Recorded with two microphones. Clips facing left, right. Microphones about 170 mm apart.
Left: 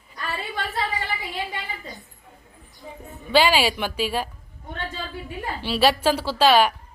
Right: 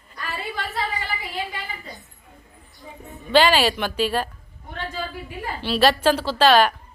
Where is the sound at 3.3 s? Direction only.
10° left (ahead or behind).